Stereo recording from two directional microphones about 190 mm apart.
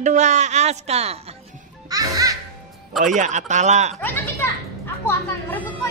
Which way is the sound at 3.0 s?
40° right (ahead or behind).